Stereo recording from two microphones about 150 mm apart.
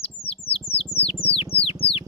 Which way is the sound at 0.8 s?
40° left (ahead or behind).